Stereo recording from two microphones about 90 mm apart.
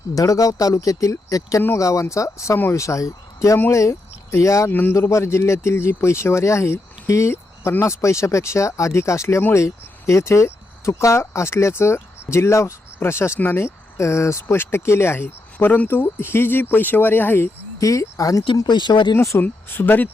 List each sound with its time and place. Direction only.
0.1 s speech: 40° left (ahead or behind)
4.7 s speech: 20° left (ahead or behind)
4.9 s speech: 35° left (ahead or behind)
17.7 s speech: 35° left (ahead or behind)
18.5 s speech: 55° left (ahead or behind)
19.1 s speech: 35° left (ahead or behind)
19.4 s speech: 20° left (ahead or behind)